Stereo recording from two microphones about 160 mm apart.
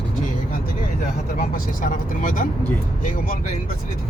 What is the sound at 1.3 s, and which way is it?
Speech, 60° left (ahead or behind).